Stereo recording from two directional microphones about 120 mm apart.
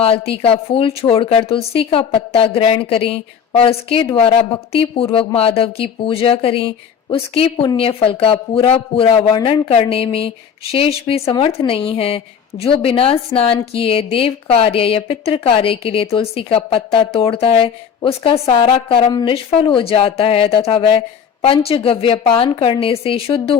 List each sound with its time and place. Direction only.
0.0 s a man's voice: 55° left (ahead or behind)